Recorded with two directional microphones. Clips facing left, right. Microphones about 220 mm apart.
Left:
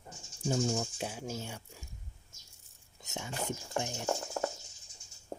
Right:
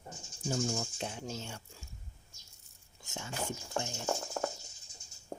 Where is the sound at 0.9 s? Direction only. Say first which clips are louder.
Left 1 dB; 10° left (ahead or behind).